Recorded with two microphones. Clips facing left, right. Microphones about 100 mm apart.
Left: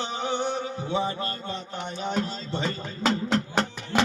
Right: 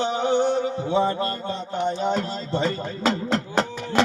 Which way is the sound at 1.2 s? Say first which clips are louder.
Right 5 dB; 35° right (ahead or behind).